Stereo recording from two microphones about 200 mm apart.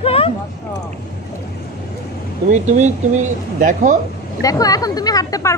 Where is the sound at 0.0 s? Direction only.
30° left (ahead or behind).